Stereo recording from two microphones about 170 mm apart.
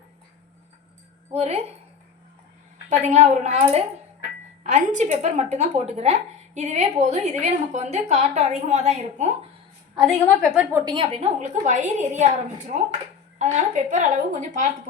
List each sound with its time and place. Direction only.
1.3 s speech: 40° right (ahead or behind)
3.0 s a woman's voice: 45° right (ahead or behind)
10.4 s a woman's voice: centre (ahead or behind)
10.7 s a woman's voice: 15° right (ahead or behind)
10.9 s a woman's voice: 30° right (ahead or behind); by 14.7 s 50° right (ahead or behind)